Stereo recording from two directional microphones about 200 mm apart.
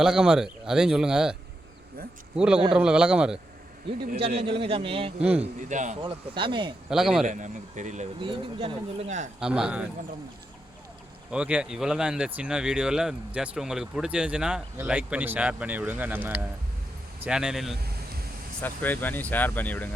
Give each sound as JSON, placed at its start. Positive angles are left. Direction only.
{"t": 0.0, "sound": "speech", "side_deg": -5}
{"t": 2.7, "sound": "speech", "side_deg": -5}
{"t": 4.2, "sound": "a man's voice", "side_deg": -30}
{"t": 5.4, "sound": "a man's voice", "side_deg": -40}
{"t": 6.9, "sound": "speech", "side_deg": 0}
{"t": 7.3, "sound": "speech", "side_deg": -40}
{"t": 8.2, "sound": "a man's voice", "side_deg": -25}
{"t": 9.4, "sound": "speech", "side_deg": -5}
{"t": 11.3, "sound": "speech", "side_deg": -5}
{"t": 18.6, "sound": "speech", "side_deg": 10}